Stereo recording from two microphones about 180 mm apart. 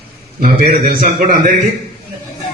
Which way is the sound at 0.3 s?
55° right (ahead or behind).